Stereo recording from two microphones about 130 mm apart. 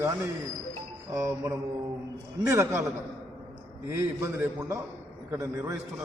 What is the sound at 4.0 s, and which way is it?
A man's voice, 20° right (ahead or behind).